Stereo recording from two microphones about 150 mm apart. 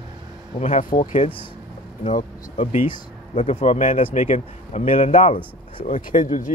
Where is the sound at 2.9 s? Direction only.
35° left (ahead or behind).